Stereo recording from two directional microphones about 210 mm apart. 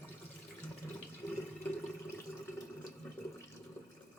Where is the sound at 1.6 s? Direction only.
10° left (ahead or behind).